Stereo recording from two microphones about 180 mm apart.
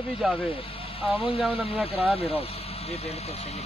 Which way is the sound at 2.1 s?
35° left (ahead or behind).